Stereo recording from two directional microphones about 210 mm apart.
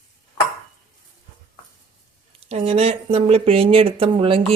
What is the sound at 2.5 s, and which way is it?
Speech, 30° right (ahead or behind).